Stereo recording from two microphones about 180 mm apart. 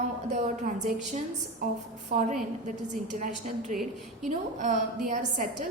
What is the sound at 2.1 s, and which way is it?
A woman's voice, 45° right (ahead or behind).